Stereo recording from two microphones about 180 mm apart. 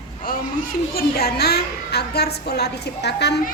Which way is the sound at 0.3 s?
50° left (ahead or behind).